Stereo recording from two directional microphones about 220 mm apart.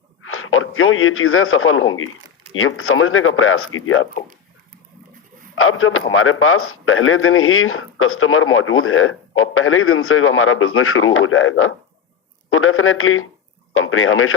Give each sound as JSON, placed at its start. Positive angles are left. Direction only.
{"t": 0.2, "sound": "a man's voice", "side_deg": 70}
{"t": 5.5, "sound": "a man's voice", "side_deg": 70}